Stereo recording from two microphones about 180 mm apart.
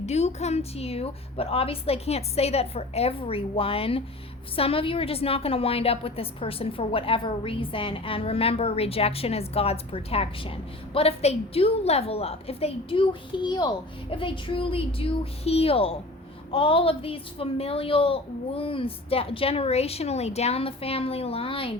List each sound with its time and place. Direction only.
0.0 s a woman's voice: 35° left (ahead or behind)